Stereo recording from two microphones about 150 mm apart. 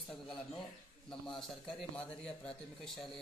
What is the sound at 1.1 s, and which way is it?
Speech, centre (ahead or behind).